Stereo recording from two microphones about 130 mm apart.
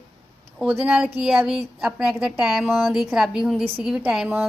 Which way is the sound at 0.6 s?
5° right (ahead or behind).